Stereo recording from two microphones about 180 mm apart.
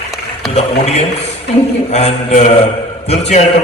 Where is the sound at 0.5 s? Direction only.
35° left (ahead or behind).